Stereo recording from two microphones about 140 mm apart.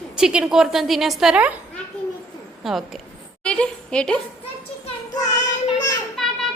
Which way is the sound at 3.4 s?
5° left (ahead or behind).